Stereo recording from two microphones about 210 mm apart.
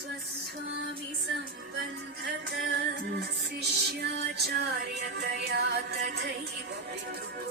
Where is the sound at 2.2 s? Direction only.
50° right (ahead or behind).